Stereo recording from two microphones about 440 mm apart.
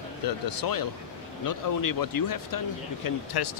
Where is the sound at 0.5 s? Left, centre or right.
Left.